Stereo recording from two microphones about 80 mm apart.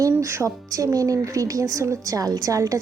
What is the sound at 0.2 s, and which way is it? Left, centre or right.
Speech, right.